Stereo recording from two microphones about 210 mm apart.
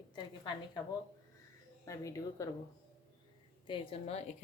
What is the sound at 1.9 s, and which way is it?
Speech, 15° left (ahead or behind).